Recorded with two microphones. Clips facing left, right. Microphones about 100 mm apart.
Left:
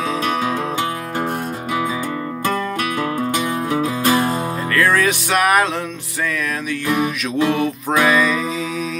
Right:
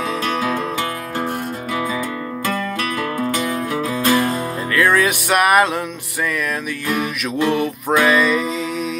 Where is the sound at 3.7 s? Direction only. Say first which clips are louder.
Even; 25° left (ahead or behind).